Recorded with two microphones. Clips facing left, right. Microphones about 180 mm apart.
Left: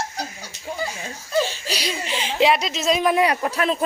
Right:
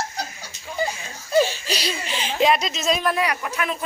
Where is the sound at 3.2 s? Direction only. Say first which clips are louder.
Left 5 dB; 35° left (ahead or behind).